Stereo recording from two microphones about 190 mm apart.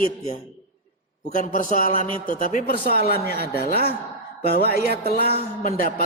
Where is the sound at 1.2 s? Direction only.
45° left (ahead or behind).